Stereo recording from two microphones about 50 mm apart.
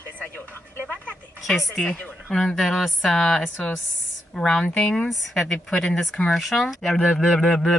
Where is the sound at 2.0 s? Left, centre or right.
Left.